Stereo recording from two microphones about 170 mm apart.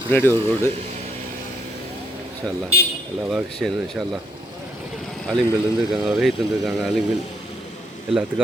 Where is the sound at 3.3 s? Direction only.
5° left (ahead or behind).